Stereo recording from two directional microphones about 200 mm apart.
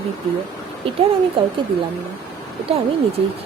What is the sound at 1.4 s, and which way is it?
Speech, 25° right (ahead or behind).